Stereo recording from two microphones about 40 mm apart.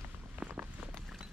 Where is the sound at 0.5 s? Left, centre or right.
Right.